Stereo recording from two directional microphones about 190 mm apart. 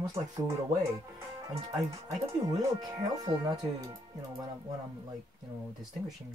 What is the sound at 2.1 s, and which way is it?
Speech, 20° right (ahead or behind).